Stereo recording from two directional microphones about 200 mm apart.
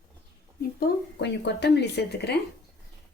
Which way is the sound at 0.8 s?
55° left (ahead or behind).